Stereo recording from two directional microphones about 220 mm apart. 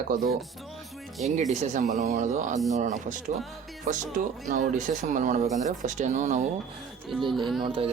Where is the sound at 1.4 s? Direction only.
30° right (ahead or behind).